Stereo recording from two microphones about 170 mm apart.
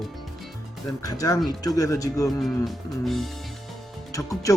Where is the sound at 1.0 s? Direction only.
20° left (ahead or behind).